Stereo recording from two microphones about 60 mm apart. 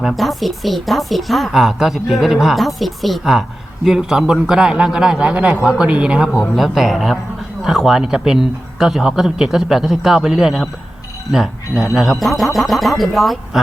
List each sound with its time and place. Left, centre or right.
0.1 s a man's voice: centre
5.3 s speech: right
5.6 s a man's voice: centre
6.4 s speech: centre